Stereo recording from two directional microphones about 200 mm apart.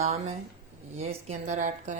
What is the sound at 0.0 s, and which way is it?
Speech, 30° right (ahead or behind).